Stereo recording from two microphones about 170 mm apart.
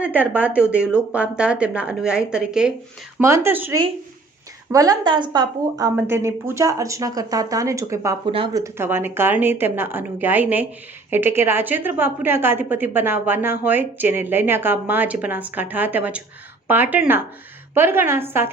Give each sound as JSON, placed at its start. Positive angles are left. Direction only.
{"t": 0.0, "sound": "a woman's voice", "side_deg": -10}
{"t": 3.2, "sound": "a woman's voice", "side_deg": -15}